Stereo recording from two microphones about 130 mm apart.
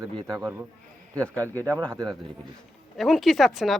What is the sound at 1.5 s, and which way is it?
Speech, 20° right (ahead or behind).